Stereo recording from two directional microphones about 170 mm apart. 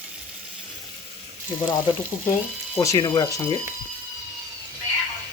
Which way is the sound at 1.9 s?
30° left (ahead or behind).